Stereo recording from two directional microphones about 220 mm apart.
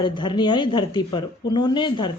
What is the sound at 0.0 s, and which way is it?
Speech, 20° left (ahead or behind).